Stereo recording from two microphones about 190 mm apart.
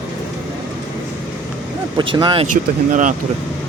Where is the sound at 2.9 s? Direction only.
40° right (ahead or behind).